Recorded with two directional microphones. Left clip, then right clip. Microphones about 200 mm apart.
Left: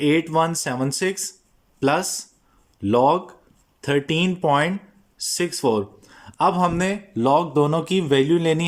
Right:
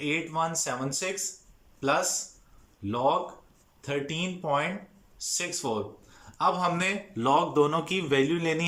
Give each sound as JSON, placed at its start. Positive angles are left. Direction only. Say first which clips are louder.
{"t": 0.0, "sound": "speech", "louder": "left 9 dB", "side_deg": 45}